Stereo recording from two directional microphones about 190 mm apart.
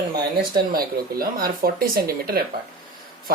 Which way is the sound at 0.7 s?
50° right (ahead or behind).